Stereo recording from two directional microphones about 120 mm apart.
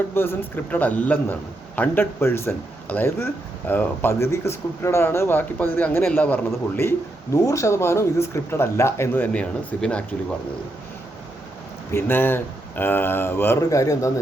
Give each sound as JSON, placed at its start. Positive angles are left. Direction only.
{"t": 0.1, "sound": "a man's voice", "side_deg": 20}
{"t": 11.9, "sound": "speech", "side_deg": 20}